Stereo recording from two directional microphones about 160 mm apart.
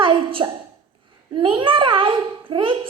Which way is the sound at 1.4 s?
30° right (ahead or behind).